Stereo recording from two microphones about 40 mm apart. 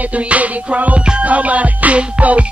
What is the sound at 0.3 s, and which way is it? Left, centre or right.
Music, right.